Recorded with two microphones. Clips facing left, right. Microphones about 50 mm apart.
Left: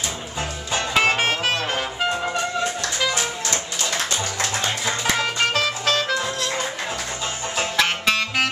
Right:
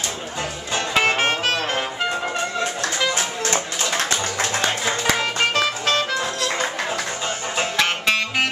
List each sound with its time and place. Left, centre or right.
0.7 s music: centre
3.0 s music: centre
3.8 s music: right
4.6 s music: centre
7.5 s music: centre